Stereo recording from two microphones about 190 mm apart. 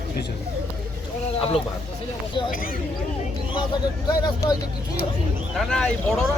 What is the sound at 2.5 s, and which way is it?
Speech, 50° left (ahead or behind).